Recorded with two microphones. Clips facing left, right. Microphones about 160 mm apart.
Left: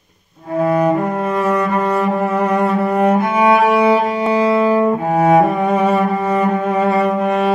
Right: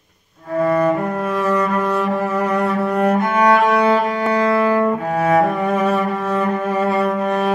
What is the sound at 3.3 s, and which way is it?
Music, 10° left (ahead or behind).